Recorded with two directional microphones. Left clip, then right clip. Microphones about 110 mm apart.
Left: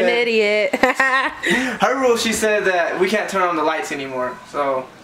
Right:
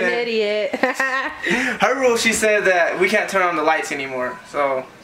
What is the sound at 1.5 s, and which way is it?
Speech, centre (ahead or behind).